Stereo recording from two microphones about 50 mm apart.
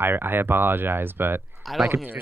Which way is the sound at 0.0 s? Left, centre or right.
Right.